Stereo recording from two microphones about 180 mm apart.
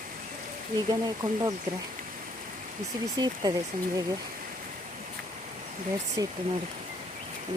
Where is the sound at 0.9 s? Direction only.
25° right (ahead or behind).